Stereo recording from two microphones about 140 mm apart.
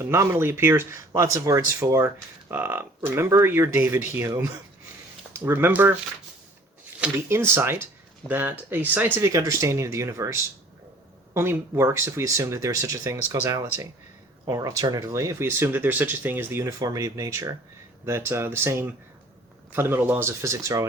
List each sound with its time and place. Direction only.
0.0 s speech: 20° right (ahead or behind)
5.3 s speech: 15° right (ahead or behind)
7.0 s speech: 15° right (ahead or behind)